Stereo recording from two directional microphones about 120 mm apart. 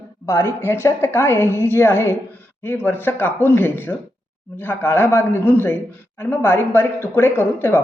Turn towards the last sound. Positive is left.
turn(degrees=15)  # may be behind; listen again after turning